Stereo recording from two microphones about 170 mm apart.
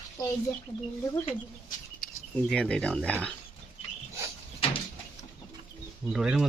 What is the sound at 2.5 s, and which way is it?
Speech, 5° left (ahead or behind).